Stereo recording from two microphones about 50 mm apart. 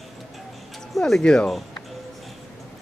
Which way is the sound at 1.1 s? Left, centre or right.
Centre.